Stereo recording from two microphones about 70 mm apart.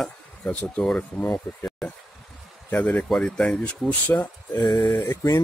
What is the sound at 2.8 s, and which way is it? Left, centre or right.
Speech, centre.